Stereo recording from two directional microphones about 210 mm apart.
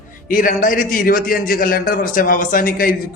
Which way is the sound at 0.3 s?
40° left (ahead or behind).